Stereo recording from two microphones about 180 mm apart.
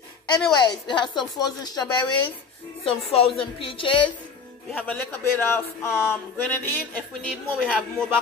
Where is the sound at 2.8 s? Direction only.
35° left (ahead or behind).